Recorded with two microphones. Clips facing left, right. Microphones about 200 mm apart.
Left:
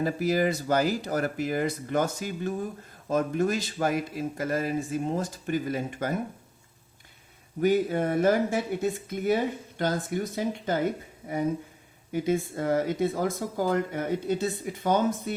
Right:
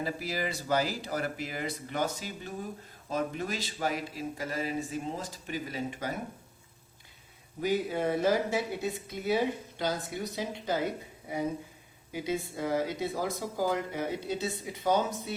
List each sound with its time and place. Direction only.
0.0 s speech: 50° left (ahead or behind)
7.6 s speech: 55° left (ahead or behind)
12.1 s speech: 50° left (ahead or behind)